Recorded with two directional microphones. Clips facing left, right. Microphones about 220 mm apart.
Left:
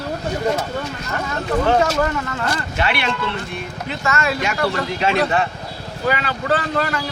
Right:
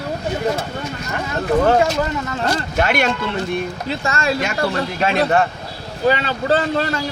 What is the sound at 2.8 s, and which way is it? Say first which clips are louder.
Speech: right 4 dB; 45° right (ahead or behind).